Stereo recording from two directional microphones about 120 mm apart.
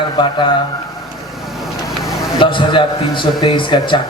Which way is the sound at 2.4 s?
45° left (ahead or behind).